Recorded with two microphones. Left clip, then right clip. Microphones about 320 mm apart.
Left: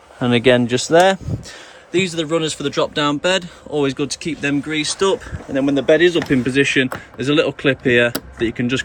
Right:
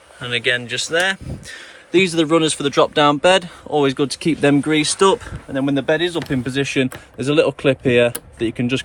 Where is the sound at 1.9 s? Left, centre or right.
Centre.